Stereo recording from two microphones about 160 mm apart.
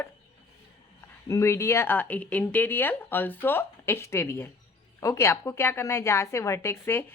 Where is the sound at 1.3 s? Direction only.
15° left (ahead or behind).